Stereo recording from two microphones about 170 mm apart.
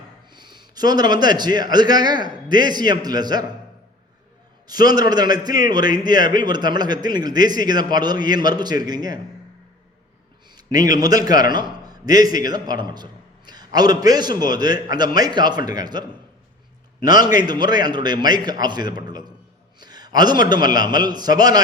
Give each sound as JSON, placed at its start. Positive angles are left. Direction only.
{"t": 0.3, "sound": "a man's voice", "side_deg": -25}
{"t": 4.7, "sound": "a man's voice", "side_deg": -25}
{"t": 10.5, "sound": "a man's voice", "side_deg": -20}
{"t": 17.2, "sound": "a man's voice", "side_deg": -25}